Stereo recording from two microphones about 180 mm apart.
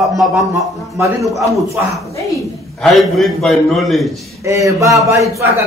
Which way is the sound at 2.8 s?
Centre (ahead or behind).